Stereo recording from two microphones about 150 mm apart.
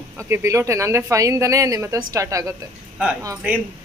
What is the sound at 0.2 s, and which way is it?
A woman's voice, 20° right (ahead or behind).